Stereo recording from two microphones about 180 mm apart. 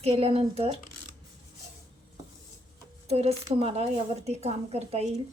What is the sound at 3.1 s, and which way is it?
Speech, 35° right (ahead or behind).